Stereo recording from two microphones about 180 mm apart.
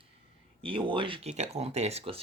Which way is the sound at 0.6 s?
30° right (ahead or behind).